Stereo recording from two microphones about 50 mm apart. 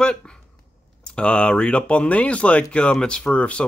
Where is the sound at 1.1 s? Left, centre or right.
Left.